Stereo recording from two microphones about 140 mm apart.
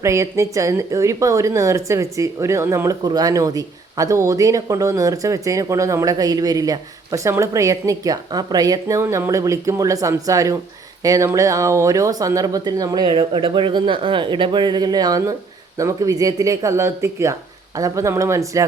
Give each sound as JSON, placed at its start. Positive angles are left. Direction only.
{"t": 0.0, "sound": "a woman's voice", "side_deg": -20}